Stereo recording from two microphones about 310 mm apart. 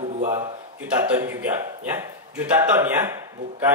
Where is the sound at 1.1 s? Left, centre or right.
Centre.